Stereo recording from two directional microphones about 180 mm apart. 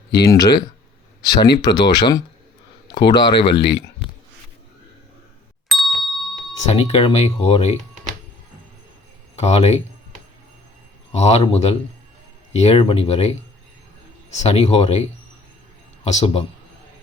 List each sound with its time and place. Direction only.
0.2 s speech: 20° left (ahead or behind)
5.6 s ding: centre (ahead or behind)
6.7 s speech: 35° left (ahead or behind)
9.3 s speech: 35° left (ahead or behind)
11.1 s speech: 35° left (ahead or behind)
14.3 s speech: 35° left (ahead or behind)